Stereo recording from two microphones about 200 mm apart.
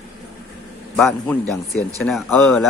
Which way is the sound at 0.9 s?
5° left (ahead or behind).